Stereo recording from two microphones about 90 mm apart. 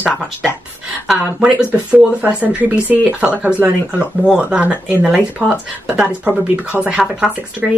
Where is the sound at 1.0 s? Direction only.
10° right (ahead or behind).